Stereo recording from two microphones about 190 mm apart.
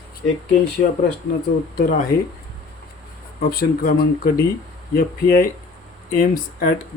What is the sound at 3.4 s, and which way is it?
Speech, 50° left (ahead or behind).